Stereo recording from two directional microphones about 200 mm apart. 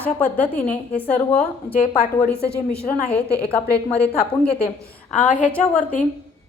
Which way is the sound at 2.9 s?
5° left (ahead or behind).